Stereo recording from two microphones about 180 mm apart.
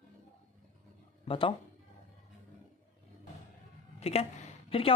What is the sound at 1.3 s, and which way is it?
Speech, 30° left (ahead or behind).